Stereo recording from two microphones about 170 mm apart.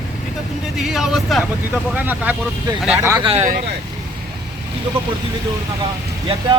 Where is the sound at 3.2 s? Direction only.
35° right (ahead or behind).